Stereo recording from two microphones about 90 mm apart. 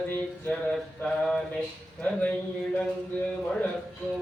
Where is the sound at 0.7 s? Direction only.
5° left (ahead or behind).